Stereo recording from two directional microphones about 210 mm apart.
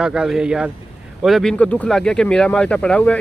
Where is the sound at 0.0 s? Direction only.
5° right (ahead or behind).